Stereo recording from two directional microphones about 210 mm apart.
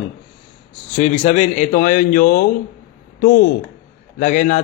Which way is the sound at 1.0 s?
30° left (ahead or behind).